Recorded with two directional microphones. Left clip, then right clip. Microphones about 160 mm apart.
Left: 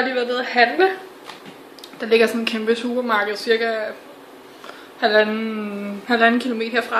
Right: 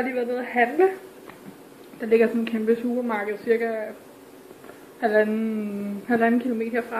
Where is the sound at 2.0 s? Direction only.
25° left (ahead or behind).